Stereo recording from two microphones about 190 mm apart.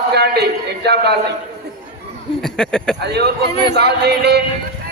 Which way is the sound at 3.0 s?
60° right (ahead or behind).